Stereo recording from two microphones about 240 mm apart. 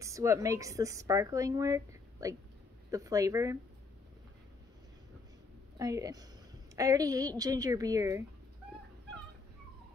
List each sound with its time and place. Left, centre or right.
0.0 s speech: centre
5.8 s speech: centre